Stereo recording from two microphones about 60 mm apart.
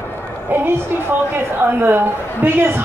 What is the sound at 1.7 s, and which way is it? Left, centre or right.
A man's voice, right.